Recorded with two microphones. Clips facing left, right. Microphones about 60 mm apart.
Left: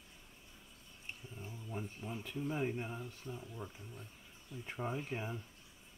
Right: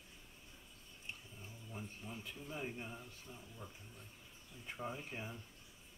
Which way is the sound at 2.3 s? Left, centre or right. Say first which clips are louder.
Left 10 dB; left.